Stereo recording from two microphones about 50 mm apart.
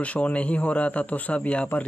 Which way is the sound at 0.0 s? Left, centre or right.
Left.